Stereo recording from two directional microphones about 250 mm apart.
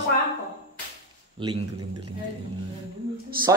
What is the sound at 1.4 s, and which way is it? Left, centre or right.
Speech, centre.